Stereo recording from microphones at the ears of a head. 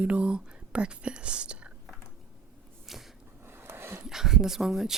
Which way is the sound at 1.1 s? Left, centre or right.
Right.